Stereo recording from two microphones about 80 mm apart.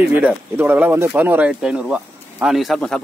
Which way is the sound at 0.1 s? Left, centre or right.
Right.